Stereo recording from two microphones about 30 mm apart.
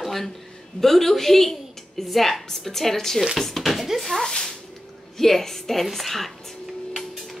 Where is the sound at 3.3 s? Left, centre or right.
Centre.